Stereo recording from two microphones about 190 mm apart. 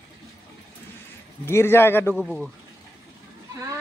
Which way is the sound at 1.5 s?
15° left (ahead or behind).